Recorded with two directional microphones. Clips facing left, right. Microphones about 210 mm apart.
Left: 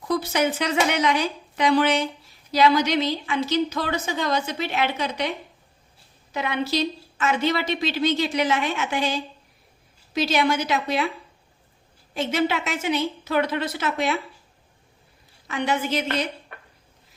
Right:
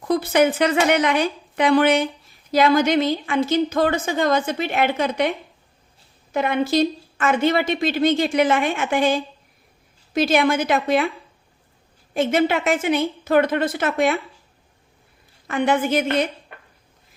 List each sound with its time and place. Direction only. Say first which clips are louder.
0.1 s a woman's voice: right 5 dB; 55° right (ahead or behind)
6.3 s a woman's voice: right 6 dB; 50° right (ahead or behind)
12.1 s a woman's voice: right 5 dB; 55° right (ahead or behind)
15.4 s a woman's voice: right 5 dB; 55° right (ahead or behind)